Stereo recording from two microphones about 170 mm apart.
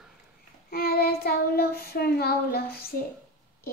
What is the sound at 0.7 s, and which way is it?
Child singing, 65° left (ahead or behind).